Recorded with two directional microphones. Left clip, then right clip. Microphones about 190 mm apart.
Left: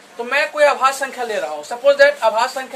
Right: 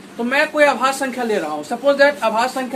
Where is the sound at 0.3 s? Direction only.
20° left (ahead or behind).